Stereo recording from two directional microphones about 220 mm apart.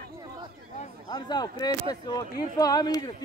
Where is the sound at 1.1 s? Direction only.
20° left (ahead or behind).